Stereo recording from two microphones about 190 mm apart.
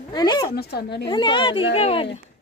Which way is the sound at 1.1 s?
25° left (ahead or behind).